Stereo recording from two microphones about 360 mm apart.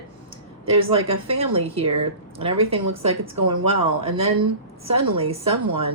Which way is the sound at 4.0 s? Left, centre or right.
Centre.